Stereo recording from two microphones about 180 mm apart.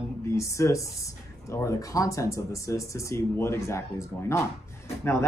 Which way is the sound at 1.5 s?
20° left (ahead or behind).